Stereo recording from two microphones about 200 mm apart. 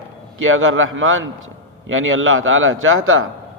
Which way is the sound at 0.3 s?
85° right.